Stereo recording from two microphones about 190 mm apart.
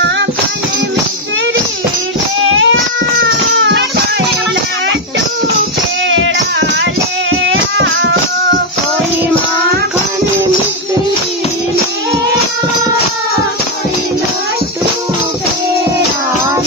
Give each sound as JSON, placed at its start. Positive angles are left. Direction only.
{"t": 2.5, "sound": "baby cry", "side_deg": -90}
{"t": 3.5, "sound": "music", "side_deg": -65}
{"t": 6.0, "sound": "music", "side_deg": -80}